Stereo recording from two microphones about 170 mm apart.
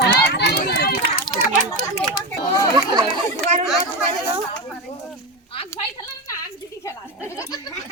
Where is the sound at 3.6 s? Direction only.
Centre (ahead or behind).